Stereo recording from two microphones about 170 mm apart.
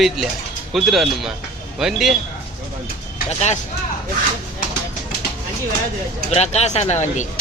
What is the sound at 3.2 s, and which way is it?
Speech, 40° left (ahead or behind).